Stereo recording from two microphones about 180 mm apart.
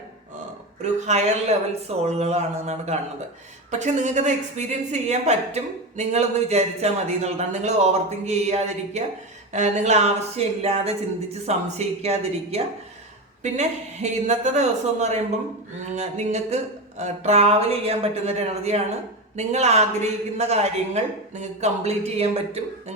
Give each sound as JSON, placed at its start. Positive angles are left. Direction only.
{"t": 0.8, "sound": "a woman's voice", "side_deg": -40}